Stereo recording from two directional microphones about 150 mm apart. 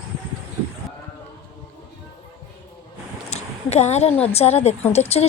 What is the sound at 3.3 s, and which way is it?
A woman's voice, 45° left (ahead or behind).